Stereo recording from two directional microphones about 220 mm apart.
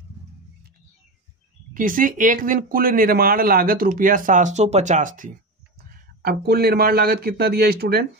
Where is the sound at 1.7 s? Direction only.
40° right (ahead or behind).